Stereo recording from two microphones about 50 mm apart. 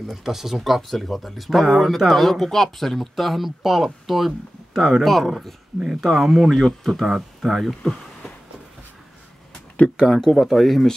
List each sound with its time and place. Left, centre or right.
0.1 s speech: centre
5.8 s speech: centre
6.0 s speech: centre
7.1 s speech: centre
7.8 s a sound: centre
10.3 s speech: centre